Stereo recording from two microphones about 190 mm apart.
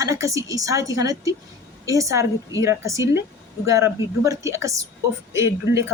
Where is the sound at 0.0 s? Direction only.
15° right (ahead or behind).